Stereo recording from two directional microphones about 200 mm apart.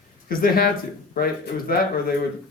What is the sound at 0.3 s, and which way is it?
A man's voice, 50° left (ahead or behind).